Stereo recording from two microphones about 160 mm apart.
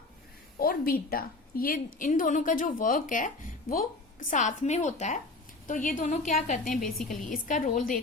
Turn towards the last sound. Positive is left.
turn(degrees=55)  # may be behind; listen again after turning